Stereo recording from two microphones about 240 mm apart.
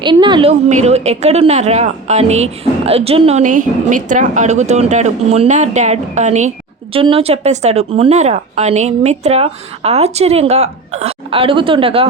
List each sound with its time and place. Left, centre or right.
0.0 s a woman's voice: centre